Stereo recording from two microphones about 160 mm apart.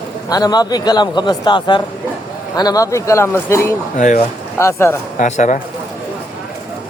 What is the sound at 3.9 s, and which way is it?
Speech, 50° left (ahead or behind).